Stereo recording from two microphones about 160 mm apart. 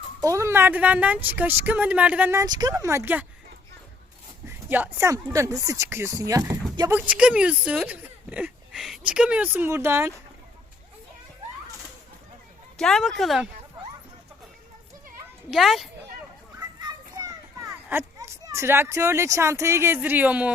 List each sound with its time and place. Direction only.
0.3 s speech: 15° right (ahead or behind)
2.4 s speech: 25° right (ahead or behind)
4.4 s speech: 15° right (ahead or behind)
6.9 s speech: 10° right (ahead or behind)
12.7 s a woman's voice: 5° left (ahead or behind)
15.4 s a woman's voice: centre (ahead or behind)
16.6 s children playing: 25° right (ahead or behind)
17.8 s speech: 15° right (ahead or behind)